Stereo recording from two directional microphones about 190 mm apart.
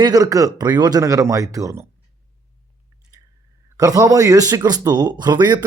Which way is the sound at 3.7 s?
20° right (ahead or behind).